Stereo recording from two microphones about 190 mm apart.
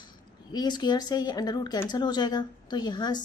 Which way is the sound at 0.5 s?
20° left (ahead or behind).